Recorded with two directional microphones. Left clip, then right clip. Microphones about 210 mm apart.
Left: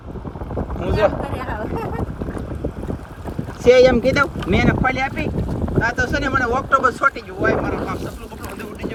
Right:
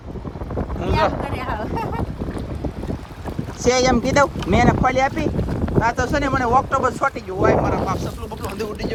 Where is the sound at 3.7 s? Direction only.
20° right (ahead or behind).